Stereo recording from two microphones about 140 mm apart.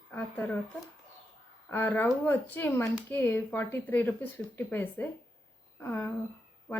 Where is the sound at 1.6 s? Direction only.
15° left (ahead or behind).